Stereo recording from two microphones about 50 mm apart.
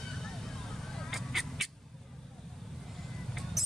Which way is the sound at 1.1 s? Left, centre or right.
Centre.